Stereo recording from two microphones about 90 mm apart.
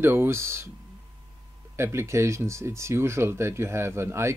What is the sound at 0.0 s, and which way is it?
Speech, 25° right (ahead or behind).